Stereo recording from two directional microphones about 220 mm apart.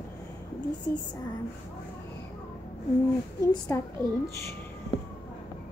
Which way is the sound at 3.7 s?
10° left (ahead or behind).